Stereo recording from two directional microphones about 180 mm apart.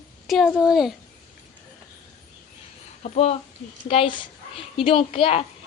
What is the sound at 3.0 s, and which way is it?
A child's voice, 35° left (ahead or behind).